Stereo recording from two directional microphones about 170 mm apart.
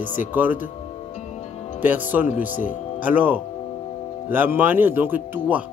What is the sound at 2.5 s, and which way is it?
Speech, 50° left (ahead or behind).